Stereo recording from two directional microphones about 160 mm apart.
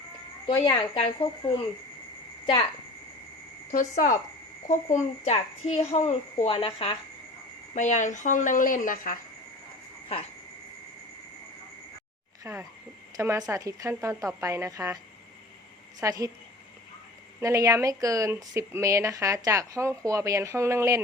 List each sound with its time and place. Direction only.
0.4 s speech: 30° left (ahead or behind)
3.7 s a child's voice: 55° left (ahead or behind); by 6.9 s 35° left (ahead or behind)
7.8 s speech: 50° left (ahead or behind)
12.4 s speech: 15° right (ahead or behind)
16.0 s speech: 20° right (ahead or behind)
17.4 s speech: 20° right (ahead or behind)